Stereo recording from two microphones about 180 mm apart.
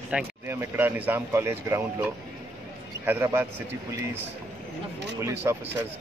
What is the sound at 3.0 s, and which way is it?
Speech, 15° right (ahead or behind).